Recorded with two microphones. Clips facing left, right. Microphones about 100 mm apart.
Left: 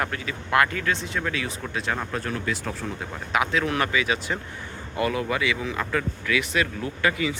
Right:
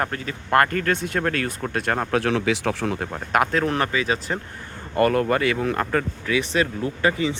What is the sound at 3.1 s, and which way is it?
Speech, 45° right (ahead or behind).